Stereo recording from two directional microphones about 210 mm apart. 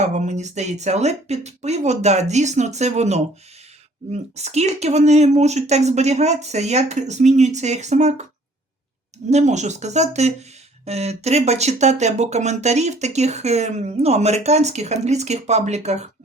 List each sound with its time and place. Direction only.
0.0 s speech: 35° right (ahead or behind)